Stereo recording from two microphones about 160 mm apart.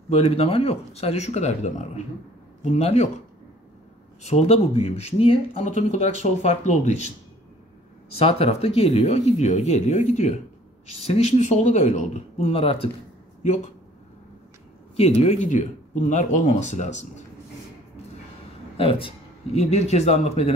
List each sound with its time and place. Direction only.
0.1 s speech: 40° left (ahead or behind)
4.2 s speech: 45° left (ahead or behind)
5.7 s speech: 45° left (ahead or behind)
8.2 s speech: 40° left (ahead or behind)
15.0 s speech: 40° left (ahead or behind)
18.8 s speech: 35° left (ahead or behind)